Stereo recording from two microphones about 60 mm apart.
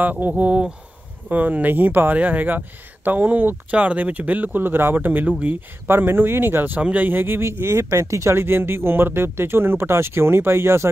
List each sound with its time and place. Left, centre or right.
0.0 s speech: right